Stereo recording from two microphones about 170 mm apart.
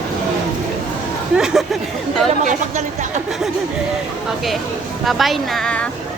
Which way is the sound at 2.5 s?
45° right (ahead or behind).